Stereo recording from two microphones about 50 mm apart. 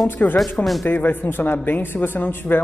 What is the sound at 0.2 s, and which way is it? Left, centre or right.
A woman's voice, left.